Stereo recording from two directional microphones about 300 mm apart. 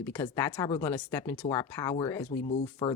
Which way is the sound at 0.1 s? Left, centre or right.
Centre.